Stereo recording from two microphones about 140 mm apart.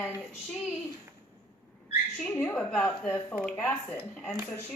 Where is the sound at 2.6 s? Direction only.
10° left (ahead or behind).